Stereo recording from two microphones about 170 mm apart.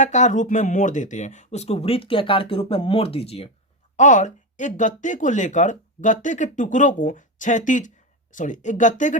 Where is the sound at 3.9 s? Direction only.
45° left (ahead or behind).